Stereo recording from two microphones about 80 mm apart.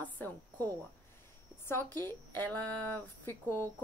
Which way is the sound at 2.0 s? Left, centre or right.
Left.